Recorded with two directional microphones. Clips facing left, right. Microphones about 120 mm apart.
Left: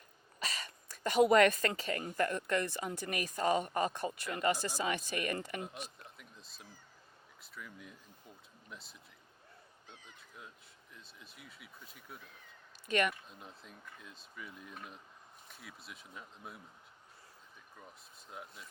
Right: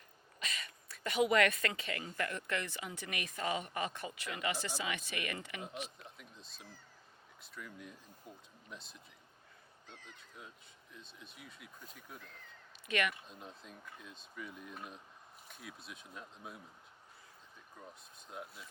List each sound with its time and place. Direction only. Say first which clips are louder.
0.3 s a sound: left 3 dB; 35° left (ahead or behind)
2.1 s a woman's voice: left 6 dB; 40° left (ahead or behind)
6.1 s a sound: right 1 dB; centre (ahead or behind)
7.4 s speech: right 1 dB; centre (ahead or behind)
12.9 s a woman's voice: left 3 dB; 35° left (ahead or behind)
13.2 s speech: right 1 dB; centre (ahead or behind)
18.3 s speech: right 1 dB; centre (ahead or behind)